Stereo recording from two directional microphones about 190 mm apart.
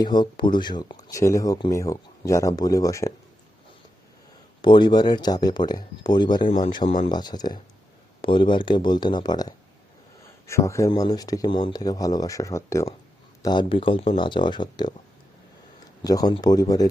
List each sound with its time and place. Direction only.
0.0 s speech: 25° left (ahead or behind)
4.6 s speech: 25° left (ahead or behind)
16.0 s speech: 20° left (ahead or behind)